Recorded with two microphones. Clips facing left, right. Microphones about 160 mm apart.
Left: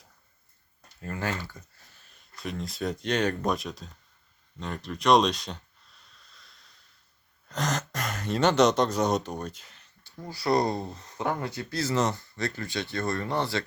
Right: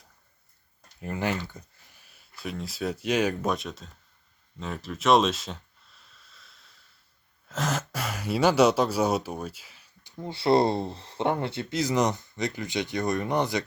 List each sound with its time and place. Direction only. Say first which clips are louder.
1.0 s speech: right 3 dB; 15° right (ahead or behind); by 3.9 s centre (ahead or behind)
4.6 s a sound: even; centre (ahead or behind)
7.4 s speech: right 1 dB; 5° right (ahead or behind)
10.0 s speech: right 4 dB; 20° right (ahead or behind)